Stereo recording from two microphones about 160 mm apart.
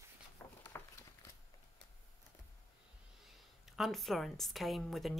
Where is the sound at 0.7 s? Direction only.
15° left (ahead or behind).